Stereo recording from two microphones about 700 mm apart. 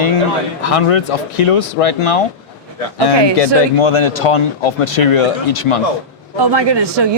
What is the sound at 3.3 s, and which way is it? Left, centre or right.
Speech, left.